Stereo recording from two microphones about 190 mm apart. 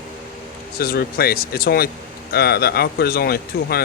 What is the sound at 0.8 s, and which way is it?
Speech, 55° left (ahead or behind).